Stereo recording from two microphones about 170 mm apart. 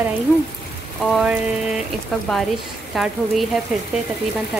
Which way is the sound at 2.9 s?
Centre (ahead or behind).